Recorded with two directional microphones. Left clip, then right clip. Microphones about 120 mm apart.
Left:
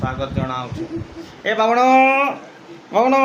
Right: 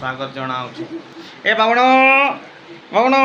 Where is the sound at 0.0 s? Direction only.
10° left (ahead or behind).